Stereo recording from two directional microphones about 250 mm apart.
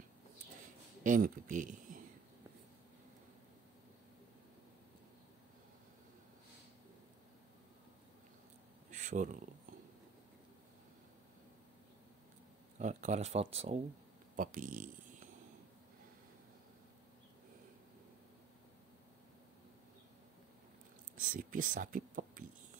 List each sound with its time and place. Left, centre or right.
1.0 s speech: right
8.9 s a sound: right
12.7 s speech: right
21.3 s speech: right